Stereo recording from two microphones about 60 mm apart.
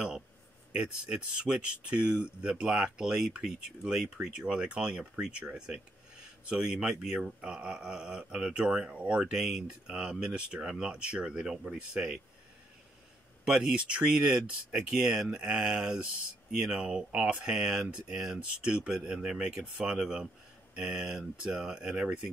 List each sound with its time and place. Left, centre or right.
0.7 s speech: centre
13.5 s speech: centre